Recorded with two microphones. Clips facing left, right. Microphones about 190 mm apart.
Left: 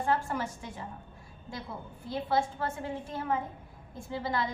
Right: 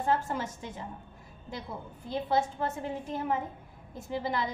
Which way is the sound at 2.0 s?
20° right (ahead or behind).